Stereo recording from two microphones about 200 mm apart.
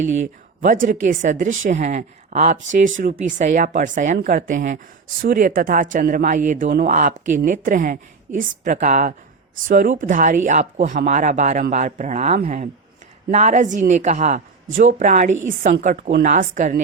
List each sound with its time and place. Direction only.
0.6 s speech: 40° right (ahead or behind)